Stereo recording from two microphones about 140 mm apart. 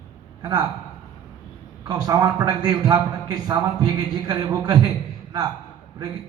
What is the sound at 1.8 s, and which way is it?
A man's voice, 25° right (ahead or behind).